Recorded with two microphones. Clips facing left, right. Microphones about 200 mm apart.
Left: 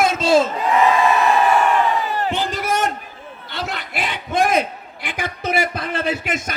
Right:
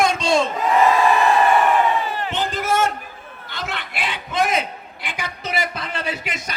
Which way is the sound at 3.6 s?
40° left (ahead or behind).